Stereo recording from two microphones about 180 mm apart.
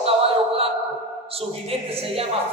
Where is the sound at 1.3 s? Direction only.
30° right (ahead or behind).